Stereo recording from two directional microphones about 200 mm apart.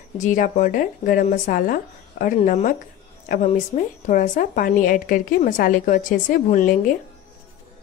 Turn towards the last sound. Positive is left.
turn(degrees=40)  # may be behind; listen again after turning